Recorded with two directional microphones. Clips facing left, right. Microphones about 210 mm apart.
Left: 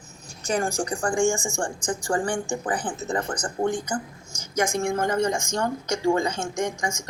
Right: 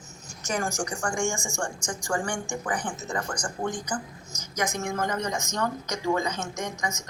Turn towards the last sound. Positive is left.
turn(degrees=30)  # may be behind; listen again after turning